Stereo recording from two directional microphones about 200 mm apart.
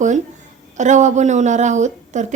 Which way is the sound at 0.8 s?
35° right (ahead or behind).